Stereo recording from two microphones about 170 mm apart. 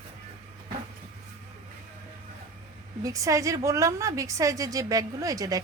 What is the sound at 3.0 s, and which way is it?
A woman's voice, 20° right (ahead or behind).